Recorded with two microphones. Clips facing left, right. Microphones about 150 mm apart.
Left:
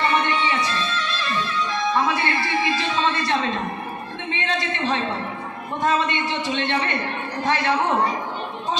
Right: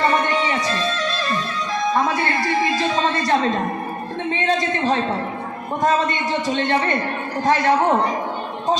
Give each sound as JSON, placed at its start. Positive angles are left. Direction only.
{"t": 0.0, "sound": "music", "side_deg": -40}
{"t": 4.4, "sound": "a sound", "side_deg": -40}
{"t": 5.8, "sound": "a man's voice", "side_deg": -40}